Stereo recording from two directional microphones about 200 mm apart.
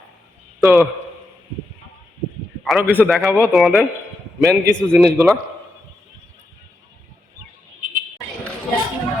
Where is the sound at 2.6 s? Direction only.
Centre (ahead or behind).